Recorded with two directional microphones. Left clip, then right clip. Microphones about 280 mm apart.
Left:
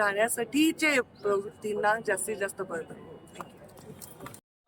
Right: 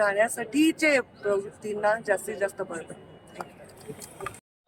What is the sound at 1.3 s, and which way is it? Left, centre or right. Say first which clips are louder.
Speech: right 2 dB; left.